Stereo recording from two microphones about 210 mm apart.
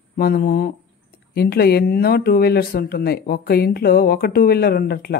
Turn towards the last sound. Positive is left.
turn(degrees=45)  # may be behind; listen again after turning